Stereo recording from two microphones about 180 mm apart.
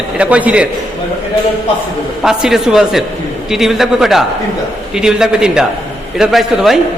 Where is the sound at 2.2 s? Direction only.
5° right (ahead or behind).